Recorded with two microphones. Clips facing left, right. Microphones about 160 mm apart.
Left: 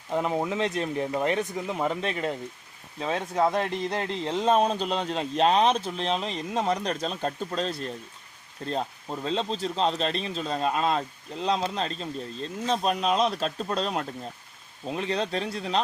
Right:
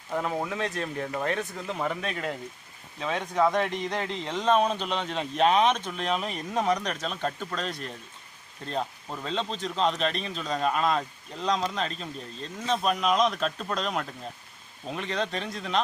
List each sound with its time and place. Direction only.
0.1 s speech: 20° left (ahead or behind)
2.0 s speech: 30° left (ahead or behind)
9.2 s speech: 35° left (ahead or behind)